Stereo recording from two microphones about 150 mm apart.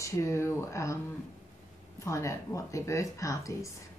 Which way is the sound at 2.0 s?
20° left (ahead or behind).